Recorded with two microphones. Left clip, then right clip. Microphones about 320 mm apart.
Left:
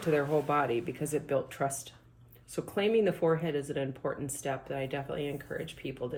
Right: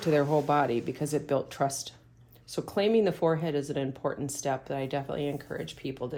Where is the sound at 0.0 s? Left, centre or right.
Right.